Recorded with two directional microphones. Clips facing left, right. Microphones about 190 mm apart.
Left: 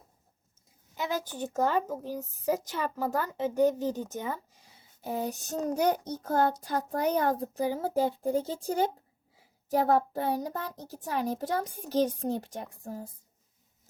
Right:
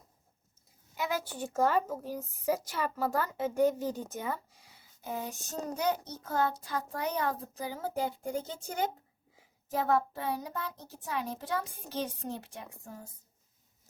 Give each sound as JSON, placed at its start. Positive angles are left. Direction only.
{"t": 1.5, "sound": "a woman's voice", "side_deg": 15}
{"t": 5.0, "sound": "child singing", "side_deg": 35}